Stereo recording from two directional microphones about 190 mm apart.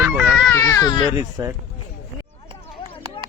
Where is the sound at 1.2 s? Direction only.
20° right (ahead or behind).